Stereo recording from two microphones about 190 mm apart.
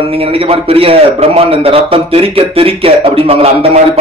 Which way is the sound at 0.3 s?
30° right (ahead or behind).